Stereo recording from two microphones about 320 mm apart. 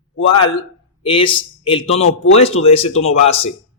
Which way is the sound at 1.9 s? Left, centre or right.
Left.